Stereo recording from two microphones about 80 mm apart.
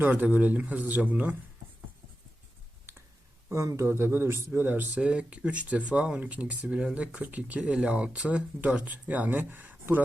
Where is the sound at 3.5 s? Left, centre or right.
Right.